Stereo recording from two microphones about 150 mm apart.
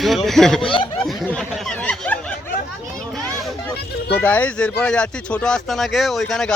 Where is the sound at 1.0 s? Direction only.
5° left (ahead or behind).